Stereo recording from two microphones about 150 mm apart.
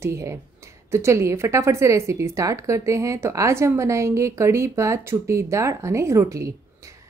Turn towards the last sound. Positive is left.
turn(degrees=-20)  # may be behind; listen again after turning